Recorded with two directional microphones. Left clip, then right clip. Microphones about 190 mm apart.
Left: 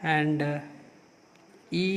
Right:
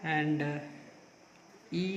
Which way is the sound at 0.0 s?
35° left (ahead or behind).